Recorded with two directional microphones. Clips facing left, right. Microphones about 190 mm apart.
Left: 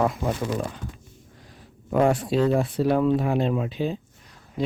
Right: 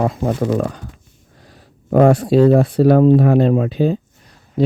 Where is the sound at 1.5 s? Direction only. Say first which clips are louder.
Right 9 dB; 35° right (ahead or behind).